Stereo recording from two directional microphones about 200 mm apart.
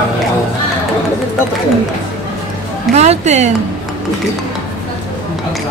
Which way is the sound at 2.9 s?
35° right (ahead or behind).